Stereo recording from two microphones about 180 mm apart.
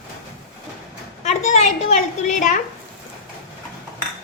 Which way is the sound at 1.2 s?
40° left (ahead or behind).